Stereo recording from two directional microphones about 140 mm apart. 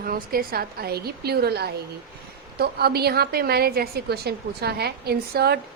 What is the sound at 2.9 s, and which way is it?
A woman's voice, 90° right.